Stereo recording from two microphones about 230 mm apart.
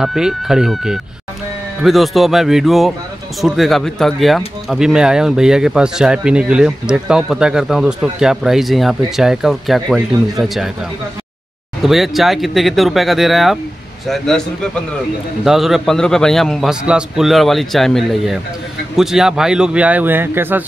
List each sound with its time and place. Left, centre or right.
0.0 s speech: centre
11.8 s speech: centre